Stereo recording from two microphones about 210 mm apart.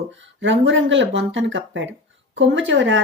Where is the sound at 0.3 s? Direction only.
60° right (ahead or behind).